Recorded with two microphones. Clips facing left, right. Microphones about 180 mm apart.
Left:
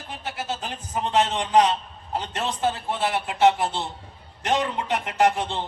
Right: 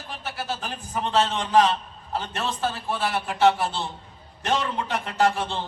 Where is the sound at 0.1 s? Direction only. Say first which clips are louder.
Left 1 dB; 20° left (ahead or behind).